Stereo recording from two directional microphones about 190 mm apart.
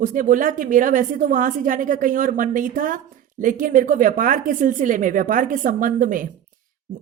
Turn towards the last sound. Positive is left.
turn(degrees=-45)  # may be behind; listen again after turning